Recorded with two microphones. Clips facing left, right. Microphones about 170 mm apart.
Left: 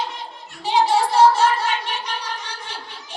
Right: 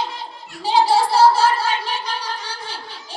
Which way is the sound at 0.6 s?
35° right (ahead or behind).